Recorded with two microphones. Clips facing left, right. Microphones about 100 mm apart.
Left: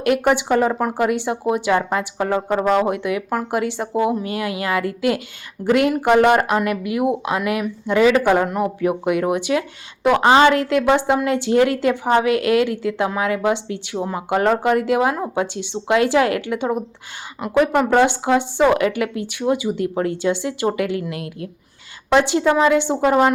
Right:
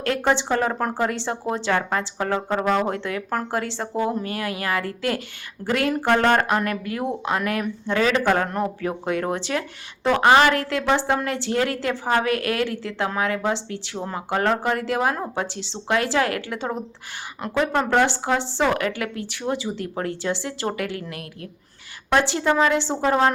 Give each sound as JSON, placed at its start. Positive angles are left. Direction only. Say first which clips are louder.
{"t": 0.0, "sound": "speech", "louder": "left 4 dB", "side_deg": 15}